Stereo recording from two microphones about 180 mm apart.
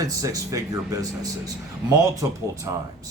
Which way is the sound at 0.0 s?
20° right (ahead or behind).